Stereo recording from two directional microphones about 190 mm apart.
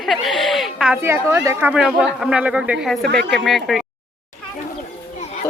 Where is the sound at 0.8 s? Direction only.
10° right (ahead or behind).